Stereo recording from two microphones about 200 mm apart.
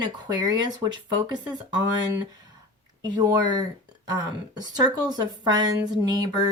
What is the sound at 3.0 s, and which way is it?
Speech, 20° right (ahead or behind).